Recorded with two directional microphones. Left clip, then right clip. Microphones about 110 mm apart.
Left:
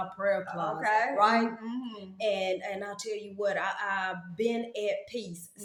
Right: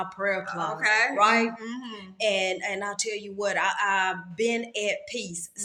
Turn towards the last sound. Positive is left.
turn(degrees=-20)  # may be behind; listen again after turning